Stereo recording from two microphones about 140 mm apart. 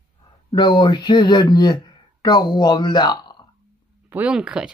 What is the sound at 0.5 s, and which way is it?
Speech, 35° left (ahead or behind).